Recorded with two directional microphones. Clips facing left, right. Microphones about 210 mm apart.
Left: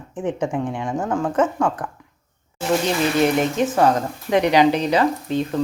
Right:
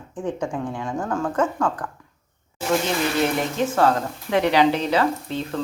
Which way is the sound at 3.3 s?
20° left (ahead or behind).